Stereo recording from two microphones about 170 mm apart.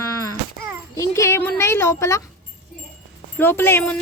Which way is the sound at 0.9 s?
15° left (ahead or behind).